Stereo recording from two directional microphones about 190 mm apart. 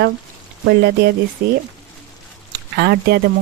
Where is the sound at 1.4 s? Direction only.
50° right (ahead or behind).